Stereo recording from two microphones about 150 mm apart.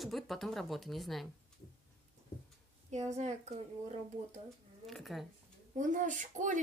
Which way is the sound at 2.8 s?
50° right (ahead or behind).